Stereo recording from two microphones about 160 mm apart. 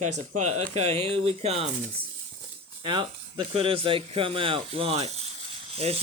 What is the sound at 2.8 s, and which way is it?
Speech, 30° right (ahead or behind).